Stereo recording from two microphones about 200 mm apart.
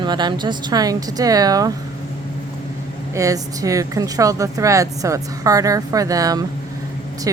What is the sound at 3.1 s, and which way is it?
Speech, 15° right (ahead or behind).